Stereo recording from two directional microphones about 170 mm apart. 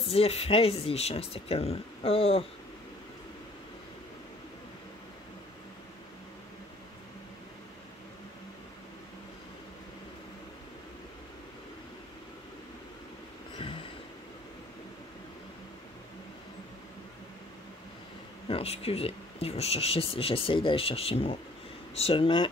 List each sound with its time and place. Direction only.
0.1 s speech: 35° left (ahead or behind)
18.5 s speech: 35° left (ahead or behind)